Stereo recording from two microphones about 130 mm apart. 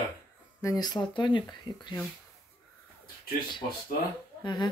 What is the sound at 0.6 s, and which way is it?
Speech, 30° left (ahead or behind).